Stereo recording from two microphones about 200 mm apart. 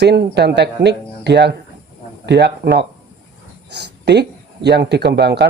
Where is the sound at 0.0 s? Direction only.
55° right (ahead or behind).